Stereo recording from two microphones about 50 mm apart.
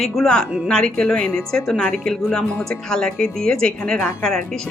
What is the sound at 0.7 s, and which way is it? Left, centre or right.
A woman's voice, centre.